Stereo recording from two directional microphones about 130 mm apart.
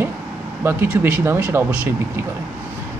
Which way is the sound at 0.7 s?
15° right (ahead or behind).